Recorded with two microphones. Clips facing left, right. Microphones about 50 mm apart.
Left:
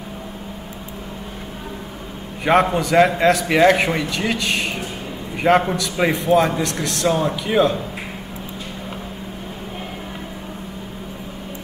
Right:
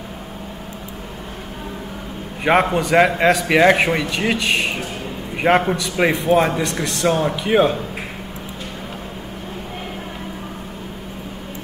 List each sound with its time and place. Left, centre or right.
2.4 s a man's voice: centre
7.2 s speech: right